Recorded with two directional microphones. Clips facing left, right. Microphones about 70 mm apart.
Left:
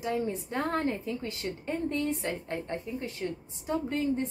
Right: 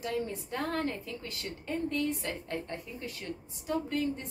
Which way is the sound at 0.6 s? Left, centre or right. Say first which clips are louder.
Left 3 dB; left.